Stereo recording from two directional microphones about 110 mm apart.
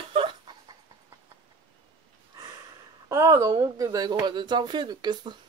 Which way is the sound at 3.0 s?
25° right (ahead or behind).